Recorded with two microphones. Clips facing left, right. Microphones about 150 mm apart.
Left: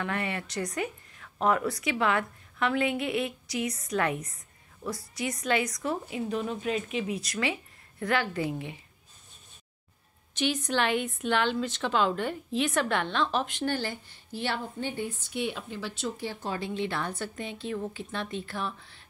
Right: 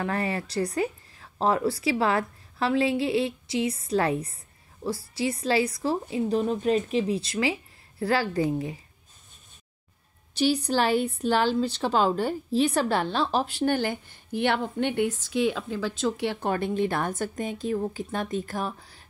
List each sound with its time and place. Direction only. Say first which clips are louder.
0.0 s a woman's voice: right 4 dB; 35° right (ahead or behind)
10.3 s a woman's voice: right 5 dB; 35° right (ahead or behind)
13.7 s a woman's voice: right 6 dB; 55° right (ahead or behind); by 15.4 s 90° right
16.0 s a woman's voice: right 7 dB; 70° right (ahead or behind); by 19.0 s 40° right (ahead or behind)